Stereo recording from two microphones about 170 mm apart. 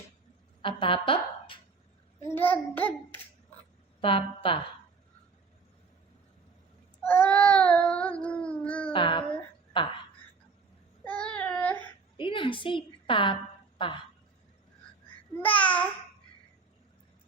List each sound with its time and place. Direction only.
0.6 s speech: 30° left (ahead or behind)
2.2 s child singing: 10° left (ahead or behind)
4.0 s a woman's voice: 30° left (ahead or behind)
7.0 s child singing: 10° left (ahead or behind)
8.9 s a child's voice: 30° left (ahead or behind)
9.3 s a sound: 30° left (ahead or behind)
11.0 s child singing: 10° left (ahead or behind)
12.1 s a sound: 30° left (ahead or behind)
15.4 s child singing: 10° left (ahead or behind)